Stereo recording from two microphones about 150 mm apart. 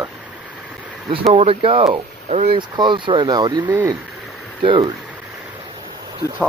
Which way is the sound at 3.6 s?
10° right (ahead or behind).